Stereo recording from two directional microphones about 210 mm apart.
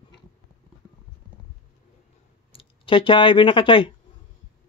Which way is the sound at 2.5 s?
25° left (ahead or behind).